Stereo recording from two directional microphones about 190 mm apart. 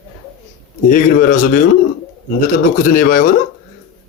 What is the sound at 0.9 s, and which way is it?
Speech, 50° left (ahead or behind).